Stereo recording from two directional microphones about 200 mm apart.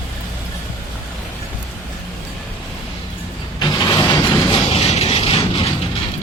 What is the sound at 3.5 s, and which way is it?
Mechanisms, 20° left (ahead or behind).